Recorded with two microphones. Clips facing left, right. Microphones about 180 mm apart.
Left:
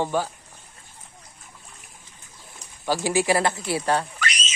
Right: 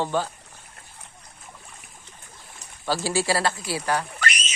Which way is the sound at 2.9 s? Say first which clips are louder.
Left 2 dB; 15° left (ahead or behind).